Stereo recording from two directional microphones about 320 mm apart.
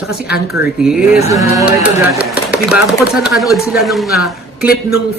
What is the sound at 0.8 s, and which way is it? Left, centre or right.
Speech, centre.